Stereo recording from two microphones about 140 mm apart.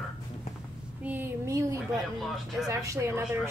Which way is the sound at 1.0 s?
15° right (ahead or behind).